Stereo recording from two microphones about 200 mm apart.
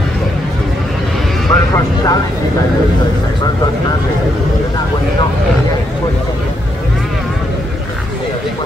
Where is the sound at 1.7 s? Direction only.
15° left (ahead or behind).